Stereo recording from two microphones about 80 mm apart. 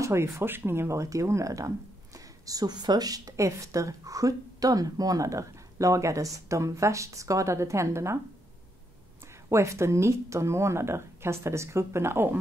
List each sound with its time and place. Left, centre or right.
0.0 s speech: right
9.5 s speech: right